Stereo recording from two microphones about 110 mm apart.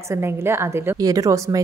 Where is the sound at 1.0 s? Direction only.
30° right (ahead or behind).